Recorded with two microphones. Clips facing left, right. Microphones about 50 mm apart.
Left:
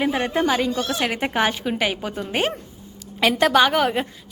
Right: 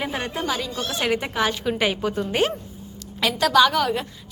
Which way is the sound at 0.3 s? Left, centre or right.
Left.